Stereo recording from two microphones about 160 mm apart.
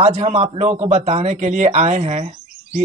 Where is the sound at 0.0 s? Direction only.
45° right (ahead or behind).